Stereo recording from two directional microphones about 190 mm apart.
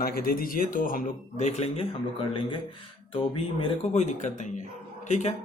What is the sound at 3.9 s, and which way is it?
A man's voice, 40° left (ahead or behind).